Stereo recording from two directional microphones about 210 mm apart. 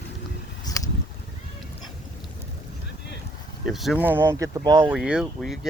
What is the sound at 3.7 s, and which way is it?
Speech, centre (ahead or behind).